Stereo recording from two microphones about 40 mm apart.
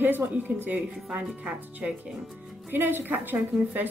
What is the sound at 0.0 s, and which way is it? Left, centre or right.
Speech, right.